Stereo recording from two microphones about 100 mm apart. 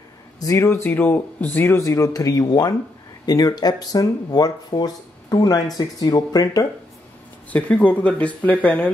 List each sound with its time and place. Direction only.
0.4 s speech: 35° left (ahead or behind)
7.5 s speech: 15° left (ahead or behind)